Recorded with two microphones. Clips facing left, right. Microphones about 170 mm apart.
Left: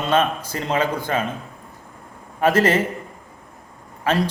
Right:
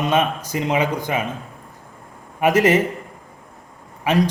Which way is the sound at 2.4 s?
15° right (ahead or behind).